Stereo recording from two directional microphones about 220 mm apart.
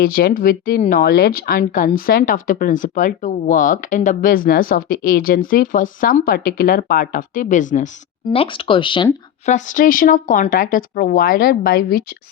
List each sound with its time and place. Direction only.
0.0 s speech: 45° left (ahead or behind)
8.3 s speech: 25° left (ahead or behind)
9.5 s speech: 35° left (ahead or behind)